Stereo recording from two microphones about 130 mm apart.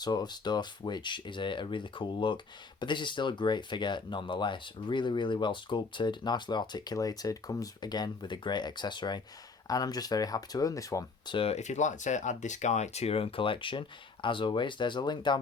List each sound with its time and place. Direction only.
0.0 s speech: 30° left (ahead or behind)
11.3 s speech: 55° left (ahead or behind); by 15.4 s 35° left (ahead or behind)